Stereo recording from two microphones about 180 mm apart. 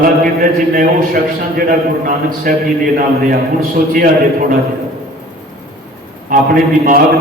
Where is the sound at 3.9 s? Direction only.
50° right (ahead or behind).